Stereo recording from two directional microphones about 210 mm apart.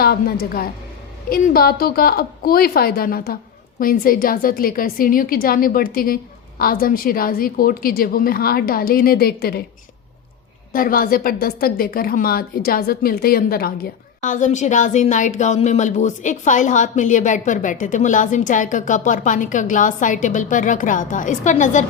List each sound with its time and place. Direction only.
0.0 s a woman's voice: 45° left (ahead or behind)
10.7 s a woman's voice: 45° left (ahead or behind)